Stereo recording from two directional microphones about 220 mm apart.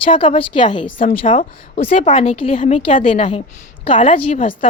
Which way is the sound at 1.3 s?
35° left (ahead or behind).